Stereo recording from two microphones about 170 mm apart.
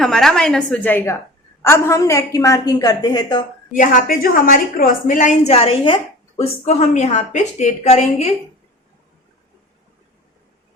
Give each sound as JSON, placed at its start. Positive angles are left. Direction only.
{"t": 0.0, "sound": "a woman's voice", "side_deg": 5}
{"t": 3.7, "sound": "a woman's voice", "side_deg": 50}